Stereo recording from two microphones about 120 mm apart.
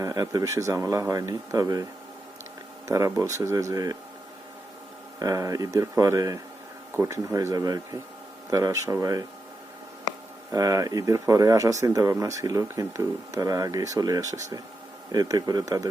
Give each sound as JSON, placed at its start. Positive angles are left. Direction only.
{"t": 0.0, "sound": "speech", "side_deg": -30}
{"t": 5.2, "sound": "speech", "side_deg": -30}
{"t": 10.5, "sound": "speech", "side_deg": -25}